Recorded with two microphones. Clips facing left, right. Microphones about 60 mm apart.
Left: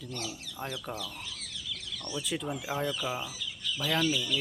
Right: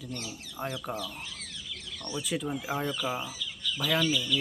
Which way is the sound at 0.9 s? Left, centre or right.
Right.